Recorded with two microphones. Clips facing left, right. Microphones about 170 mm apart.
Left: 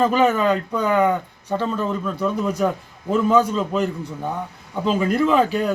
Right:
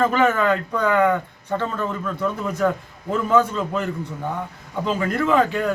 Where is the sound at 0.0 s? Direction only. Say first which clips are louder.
Left 1 dB; 15° left (ahead or behind).